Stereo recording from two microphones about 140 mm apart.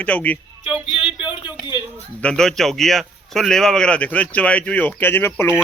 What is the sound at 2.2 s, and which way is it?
A man's voice, 5° left (ahead or behind).